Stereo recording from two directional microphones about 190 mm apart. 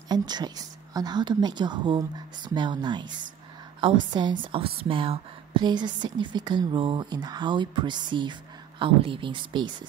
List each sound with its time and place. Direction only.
0.1 s a woman's voice: 20° right (ahead or behind)